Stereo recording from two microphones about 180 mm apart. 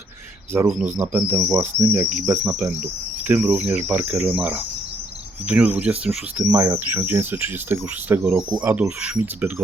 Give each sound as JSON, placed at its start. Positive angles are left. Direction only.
{"t": 0.5, "sound": "speech", "side_deg": -10}
{"t": 8.4, "sound": "speech", "side_deg": -25}
{"t": 8.6, "sound": "speech", "side_deg": -10}